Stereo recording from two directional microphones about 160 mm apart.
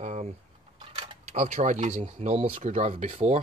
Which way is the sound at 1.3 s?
50° right (ahead or behind).